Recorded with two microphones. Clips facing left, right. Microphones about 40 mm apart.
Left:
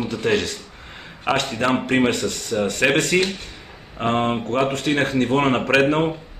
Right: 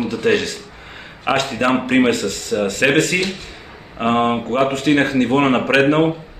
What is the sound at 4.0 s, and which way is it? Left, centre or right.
Speech, centre.